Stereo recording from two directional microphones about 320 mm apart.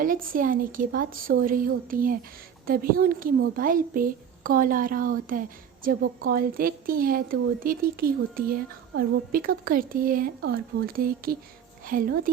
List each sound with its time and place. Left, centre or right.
0.0 s a woman's voice: right